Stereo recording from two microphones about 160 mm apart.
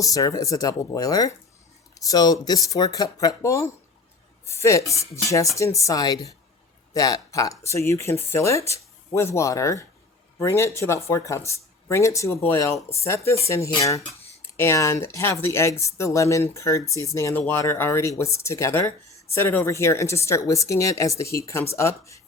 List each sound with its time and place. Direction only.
0.0 s speech: 20° left (ahead or behind)